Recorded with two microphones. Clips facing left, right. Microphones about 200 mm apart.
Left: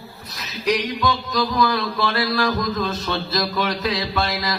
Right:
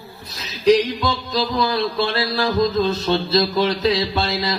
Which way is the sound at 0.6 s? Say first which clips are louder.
Right 5 dB; 30° right (ahead or behind).